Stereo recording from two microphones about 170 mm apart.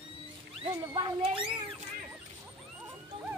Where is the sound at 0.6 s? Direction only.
30° right (ahead or behind).